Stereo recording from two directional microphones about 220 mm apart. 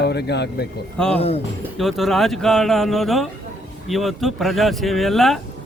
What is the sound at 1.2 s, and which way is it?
Speech, 25° left (ahead or behind).